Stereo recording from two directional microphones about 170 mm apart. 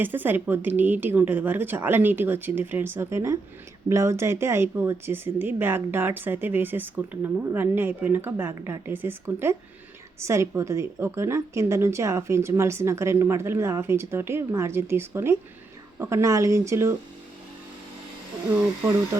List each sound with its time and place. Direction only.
0.0 s speech: 10° right (ahead or behind)